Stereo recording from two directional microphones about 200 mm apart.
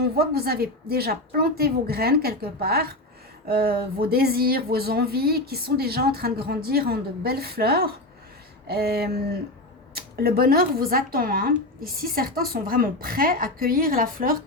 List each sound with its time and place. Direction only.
0.0 s speech: 50° right (ahead or behind)